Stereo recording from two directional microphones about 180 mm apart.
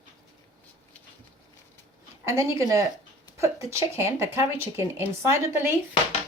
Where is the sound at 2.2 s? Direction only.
15° right (ahead or behind).